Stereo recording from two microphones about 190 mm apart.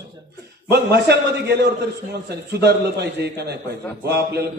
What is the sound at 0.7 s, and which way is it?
A man's voice, 60° right (ahead or behind).